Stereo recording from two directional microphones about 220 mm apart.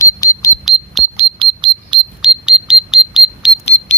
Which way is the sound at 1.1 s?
25° right (ahead or behind).